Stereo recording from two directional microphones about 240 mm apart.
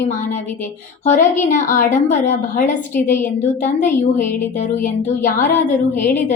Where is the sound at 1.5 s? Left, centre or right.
Left.